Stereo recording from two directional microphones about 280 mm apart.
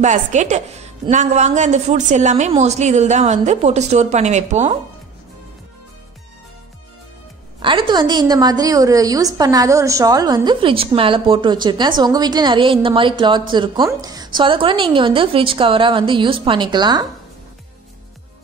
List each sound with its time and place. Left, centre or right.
0.0 s a woman's voice: right
7.6 s a woman's voice: centre